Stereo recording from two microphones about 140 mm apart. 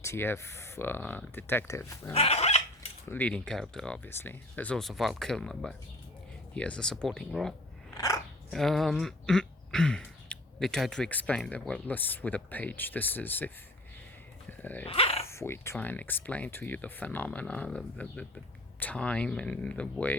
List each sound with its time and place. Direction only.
0.0 s speech: 20° left (ahead or behind)
2.1 s chicken: 45° left (ahead or behind)
3.1 s speech: 10° left (ahead or behind)
14.6 s dog: 10° left (ahead or behind)
14.8 s dog: 45° left (ahead or behind)
15.3 s speech: 20° left (ahead or behind)